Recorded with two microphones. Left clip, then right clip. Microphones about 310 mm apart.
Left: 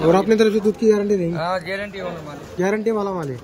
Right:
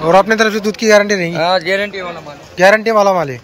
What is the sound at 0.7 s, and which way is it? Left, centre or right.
Speech, right.